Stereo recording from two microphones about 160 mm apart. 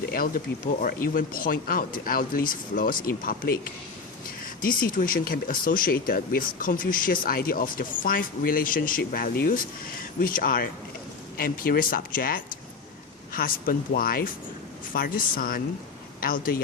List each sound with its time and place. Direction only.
0.1 s speech: 60° left (ahead or behind)